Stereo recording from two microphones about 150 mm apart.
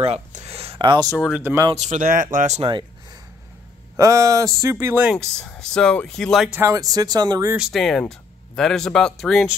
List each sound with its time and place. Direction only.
0.0 s a sound: 45° right (ahead or behind)
1.1 s speech: centre (ahead or behind)
1.4 s speech: 20° right (ahead or behind)
1.8 s speech: 55° right (ahead or behind)
2.3 s speech: 50° right (ahead or behind)
3.9 s speech: 20° right (ahead or behind)
5.1 s speech: 5° left (ahead or behind)
6.5 s speech: 20° right (ahead or behind)
7.5 s speech: centre (ahead or behind)